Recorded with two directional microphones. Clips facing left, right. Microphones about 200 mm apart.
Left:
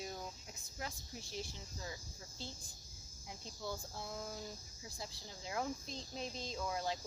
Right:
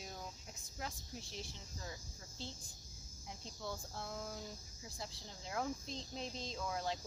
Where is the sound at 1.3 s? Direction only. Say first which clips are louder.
Left 3 dB; 5° left (ahead or behind).